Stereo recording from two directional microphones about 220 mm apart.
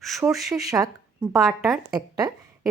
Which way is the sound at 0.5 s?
15° right (ahead or behind).